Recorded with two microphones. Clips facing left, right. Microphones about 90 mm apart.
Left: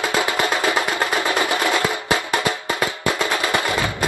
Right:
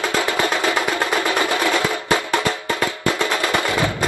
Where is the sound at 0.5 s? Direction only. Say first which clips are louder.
Even; 15° left (ahead or behind).